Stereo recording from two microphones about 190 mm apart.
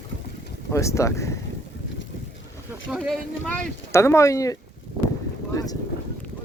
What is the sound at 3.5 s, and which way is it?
Speech, 15° left (ahead or behind).